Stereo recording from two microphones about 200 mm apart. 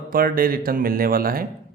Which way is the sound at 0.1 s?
45° right (ahead or behind).